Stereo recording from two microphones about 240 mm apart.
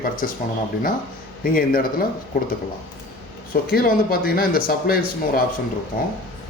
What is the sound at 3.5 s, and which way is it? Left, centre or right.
Speech, left.